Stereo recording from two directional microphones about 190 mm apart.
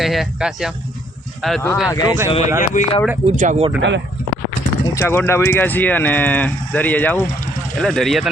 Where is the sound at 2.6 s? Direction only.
40° left (ahead or behind).